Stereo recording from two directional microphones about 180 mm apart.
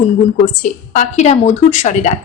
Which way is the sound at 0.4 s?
40° left (ahead or behind).